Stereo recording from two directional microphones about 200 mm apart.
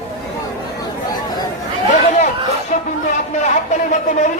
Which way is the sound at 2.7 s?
40° left (ahead or behind).